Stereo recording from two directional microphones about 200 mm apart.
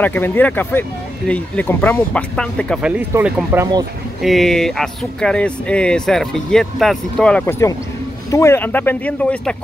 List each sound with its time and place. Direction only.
0.0 s speech: 10° left (ahead or behind)
2.9 s speech: 10° right (ahead or behind); by 9.6 s 5° left (ahead or behind)